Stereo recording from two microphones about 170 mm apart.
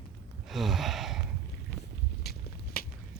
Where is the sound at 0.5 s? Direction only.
Centre (ahead or behind).